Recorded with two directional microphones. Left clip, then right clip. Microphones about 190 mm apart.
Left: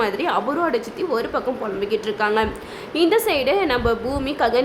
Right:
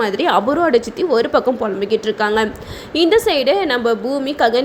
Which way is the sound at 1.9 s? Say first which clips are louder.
Right 3 dB; 20° right (ahead or behind).